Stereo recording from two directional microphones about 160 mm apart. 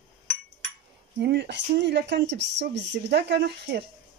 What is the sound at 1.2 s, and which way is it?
Speech, 90° right.